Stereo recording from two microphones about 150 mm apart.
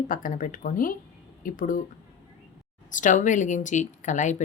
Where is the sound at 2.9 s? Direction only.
55° left (ahead or behind).